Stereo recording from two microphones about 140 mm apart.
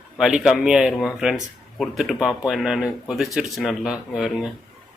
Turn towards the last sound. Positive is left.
turn(degrees=-5)  # may be behind; listen again after turning